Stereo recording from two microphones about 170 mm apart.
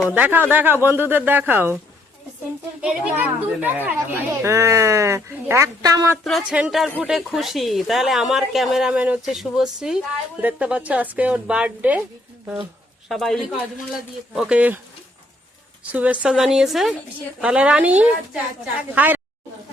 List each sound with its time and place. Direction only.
0.1 s speech: 10° right (ahead or behind)
2.8 s speech: 5° right (ahead or behind)
6.2 s speech: 5° right (ahead or behind)
13.1 s speech: centre (ahead or behind)
15.8 s speech: 10° right (ahead or behind)